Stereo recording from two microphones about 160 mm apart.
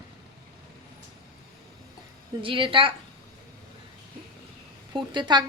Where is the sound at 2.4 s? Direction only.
30° right (ahead or behind).